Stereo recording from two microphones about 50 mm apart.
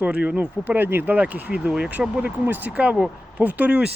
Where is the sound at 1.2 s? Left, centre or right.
Right.